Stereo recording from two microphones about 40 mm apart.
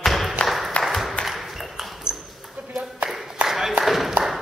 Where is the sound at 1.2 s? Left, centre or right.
Centre.